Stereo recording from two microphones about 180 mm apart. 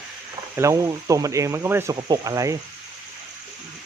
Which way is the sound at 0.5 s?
15° right (ahead or behind).